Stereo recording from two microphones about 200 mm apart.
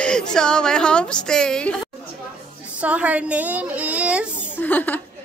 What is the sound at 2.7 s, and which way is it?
A woman's voice, 5° right (ahead or behind).